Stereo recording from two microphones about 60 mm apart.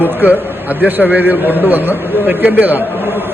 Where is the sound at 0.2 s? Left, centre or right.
Right.